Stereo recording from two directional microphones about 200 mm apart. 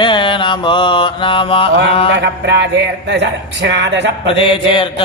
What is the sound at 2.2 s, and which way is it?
Speech, 60° right (ahead or behind).